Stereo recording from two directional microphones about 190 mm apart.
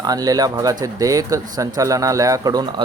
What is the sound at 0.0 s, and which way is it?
Speech, 20° right (ahead or behind).